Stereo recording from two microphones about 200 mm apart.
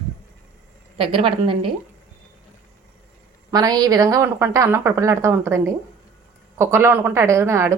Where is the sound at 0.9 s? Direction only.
25° right (ahead or behind).